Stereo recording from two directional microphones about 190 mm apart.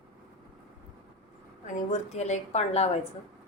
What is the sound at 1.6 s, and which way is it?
A woman's voice, 35° left (ahead or behind).